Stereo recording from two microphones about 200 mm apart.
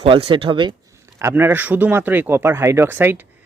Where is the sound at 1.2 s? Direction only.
15° right (ahead or behind).